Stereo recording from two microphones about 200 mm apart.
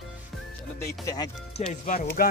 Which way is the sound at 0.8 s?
15° left (ahead or behind).